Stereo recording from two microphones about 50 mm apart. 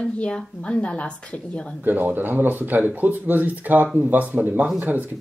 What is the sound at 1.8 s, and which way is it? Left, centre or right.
Speech, right.